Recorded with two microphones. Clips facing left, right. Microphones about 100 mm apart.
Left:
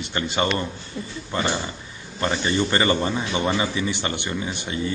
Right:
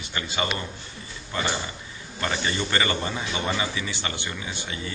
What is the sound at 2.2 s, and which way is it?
A man's voice, 30° left (ahead or behind).